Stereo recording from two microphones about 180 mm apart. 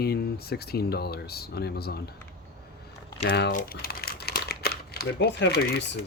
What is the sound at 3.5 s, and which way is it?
Speech, 55° left (ahead or behind).